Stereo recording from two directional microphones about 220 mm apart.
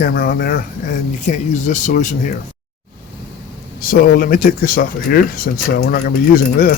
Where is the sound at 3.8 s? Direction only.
40° left (ahead or behind).